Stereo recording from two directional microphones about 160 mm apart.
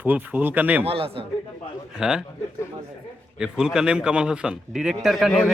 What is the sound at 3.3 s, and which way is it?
A man's voice, 5° right (ahead or behind).